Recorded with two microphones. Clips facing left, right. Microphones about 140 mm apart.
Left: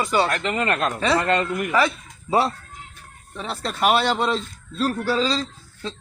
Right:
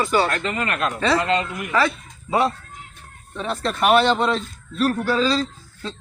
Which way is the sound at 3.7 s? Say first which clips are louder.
Right 3 dB; 15° left (ahead or behind).